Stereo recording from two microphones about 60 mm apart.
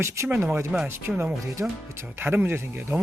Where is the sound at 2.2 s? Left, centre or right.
Right.